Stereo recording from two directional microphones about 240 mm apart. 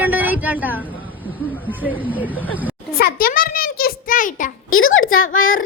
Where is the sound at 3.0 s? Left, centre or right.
Left.